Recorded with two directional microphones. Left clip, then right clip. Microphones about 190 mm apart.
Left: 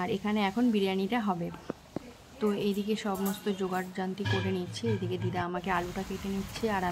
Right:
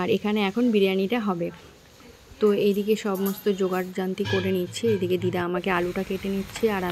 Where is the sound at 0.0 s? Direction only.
20° right (ahead or behind).